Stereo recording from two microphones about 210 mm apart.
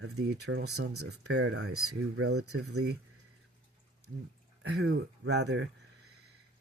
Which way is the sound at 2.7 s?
55° right (ahead or behind).